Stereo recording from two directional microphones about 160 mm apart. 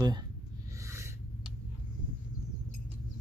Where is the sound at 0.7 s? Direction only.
15° right (ahead or behind).